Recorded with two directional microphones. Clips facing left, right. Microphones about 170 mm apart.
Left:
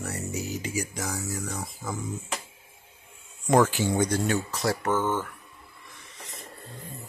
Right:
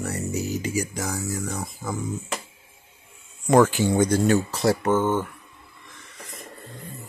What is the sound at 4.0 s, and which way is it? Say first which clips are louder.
Speech: right 6 dB; 45° right (ahead or behind).